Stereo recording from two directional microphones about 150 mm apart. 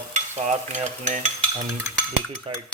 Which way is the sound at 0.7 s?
55° right (ahead or behind).